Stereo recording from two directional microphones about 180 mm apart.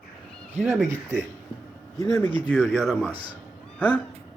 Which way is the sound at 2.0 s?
15° left (ahead or behind).